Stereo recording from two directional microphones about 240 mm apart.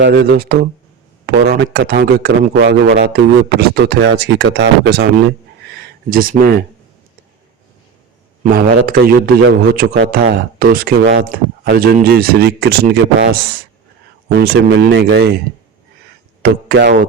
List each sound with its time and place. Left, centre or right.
0.0 s speech: right
8.4 s speech: right
11.3 s speech: right
16.4 s speech: right